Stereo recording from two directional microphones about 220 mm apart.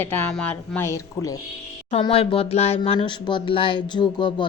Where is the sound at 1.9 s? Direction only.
25° left (ahead or behind).